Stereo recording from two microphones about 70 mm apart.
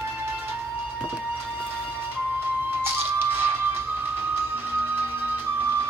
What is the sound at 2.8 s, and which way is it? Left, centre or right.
Music, right.